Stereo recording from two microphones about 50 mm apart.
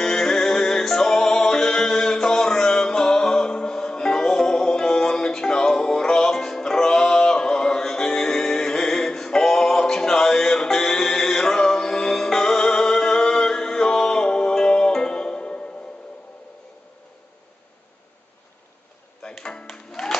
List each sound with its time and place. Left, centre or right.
0.0 s music: centre
19.2 s music: centre